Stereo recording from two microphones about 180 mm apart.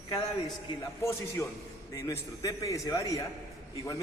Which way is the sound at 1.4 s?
15° left (ahead or behind).